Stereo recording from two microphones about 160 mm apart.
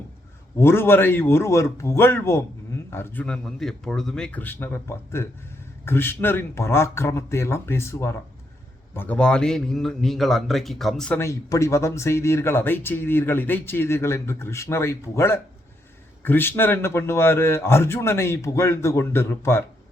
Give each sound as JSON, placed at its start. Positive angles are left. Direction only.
{"t": 0.5, "sound": "a man's voice", "side_deg": 15}
{"t": 11.2, "sound": "speech", "side_deg": 20}